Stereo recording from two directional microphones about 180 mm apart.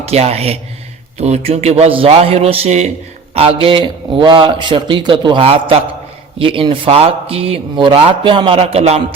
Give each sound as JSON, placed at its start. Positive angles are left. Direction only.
{"t": 0.0, "sound": "a man's voice", "side_deg": -35}